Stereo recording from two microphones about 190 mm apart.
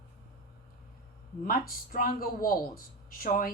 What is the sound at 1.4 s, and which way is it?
Speech, 50° left (ahead or behind).